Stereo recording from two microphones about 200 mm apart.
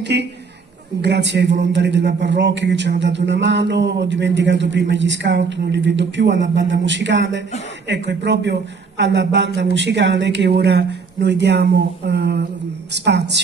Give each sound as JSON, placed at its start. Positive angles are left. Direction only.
{"t": 0.0, "sound": "a man's voice", "side_deg": -60}